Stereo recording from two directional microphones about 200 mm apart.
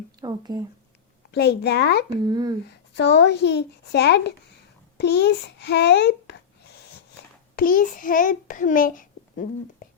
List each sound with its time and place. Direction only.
0.2 s a sound: 20° right (ahead or behind)
1.3 s a child's voice: 55° left (ahead or behind)
2.2 s speech: 20° right (ahead or behind)
2.9 s a child's voice: 60° left (ahead or behind)
4.9 s a sound: 55° left (ahead or behind)
7.5 s a child's voice: 45° left (ahead or behind)